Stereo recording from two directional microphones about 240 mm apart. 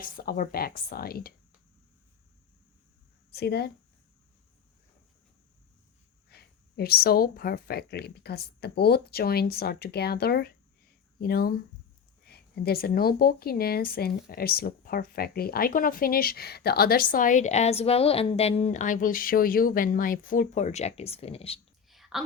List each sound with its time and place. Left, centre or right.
0.0 s speech: left
3.3 s speech: left
6.2 s speech: left
21.8 s whispering: centre